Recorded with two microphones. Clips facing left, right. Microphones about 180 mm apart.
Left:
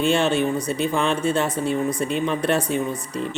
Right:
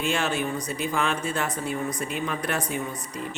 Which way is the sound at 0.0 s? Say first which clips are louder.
Left 7 dB; 25° left (ahead or behind).